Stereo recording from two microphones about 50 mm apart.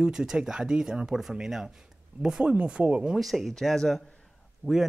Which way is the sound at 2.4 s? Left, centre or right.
Right.